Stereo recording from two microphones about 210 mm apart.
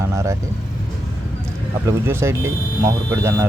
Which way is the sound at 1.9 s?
10° right (ahead or behind).